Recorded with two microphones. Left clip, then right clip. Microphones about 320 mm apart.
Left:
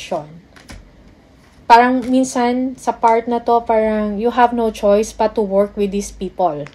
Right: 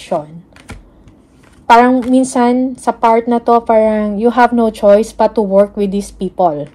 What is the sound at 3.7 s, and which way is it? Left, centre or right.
A woman's voice, right.